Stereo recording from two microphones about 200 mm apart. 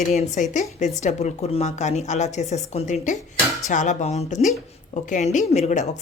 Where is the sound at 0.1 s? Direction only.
35° left (ahead or behind).